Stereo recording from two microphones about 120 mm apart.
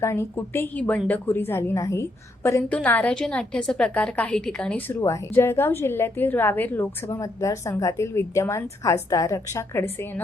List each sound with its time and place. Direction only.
0.0 s a woman's voice: 20° left (ahead or behind)
4.9 s a woman's voice: 30° left (ahead or behind)